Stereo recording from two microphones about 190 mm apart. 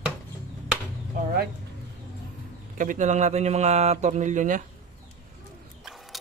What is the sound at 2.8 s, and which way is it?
Speech, 40° right (ahead or behind).